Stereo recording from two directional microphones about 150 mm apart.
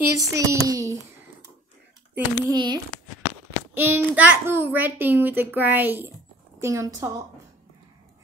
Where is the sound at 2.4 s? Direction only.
30° right (ahead or behind).